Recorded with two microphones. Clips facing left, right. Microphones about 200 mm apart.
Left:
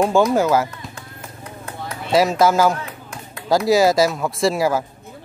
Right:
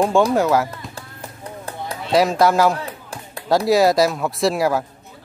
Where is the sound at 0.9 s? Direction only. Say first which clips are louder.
Right 1 dB; 35° right (ahead or behind).